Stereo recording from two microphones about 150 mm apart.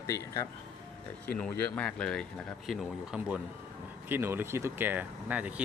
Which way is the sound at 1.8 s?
5° left (ahead or behind).